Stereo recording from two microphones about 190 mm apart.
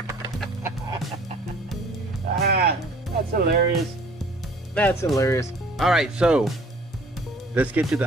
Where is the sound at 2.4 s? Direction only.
55° right (ahead or behind).